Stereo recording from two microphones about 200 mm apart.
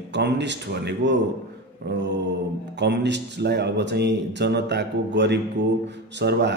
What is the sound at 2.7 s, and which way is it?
A man's voice, 60° right (ahead or behind).